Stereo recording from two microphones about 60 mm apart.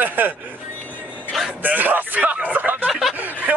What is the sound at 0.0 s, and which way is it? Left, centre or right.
Speech, right.